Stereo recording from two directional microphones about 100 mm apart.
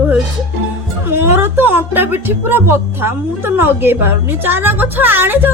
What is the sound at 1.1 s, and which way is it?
Speech, 25° right (ahead or behind).